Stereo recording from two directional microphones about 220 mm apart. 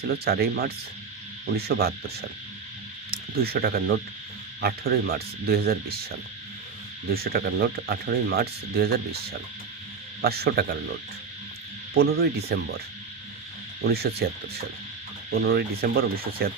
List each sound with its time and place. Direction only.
0.1 s speech: 45° right (ahead or behind)
11.9 s speech: 45° right (ahead or behind)
13.8 s speech: 45° right (ahead or behind)
15.3 s speech: 45° right (ahead or behind)